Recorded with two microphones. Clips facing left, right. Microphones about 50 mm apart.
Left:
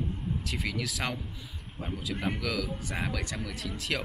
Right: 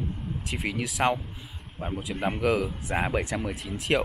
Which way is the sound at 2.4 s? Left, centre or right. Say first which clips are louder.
Right 7 dB; right.